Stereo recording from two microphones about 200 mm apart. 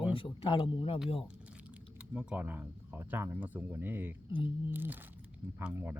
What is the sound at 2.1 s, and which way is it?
Speech, 10° right (ahead or behind).